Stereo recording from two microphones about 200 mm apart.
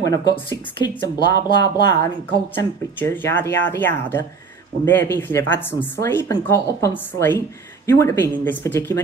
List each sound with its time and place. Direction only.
0.0 s speech: 15° left (ahead or behind)
3.0 s speech: 10° left (ahead or behind)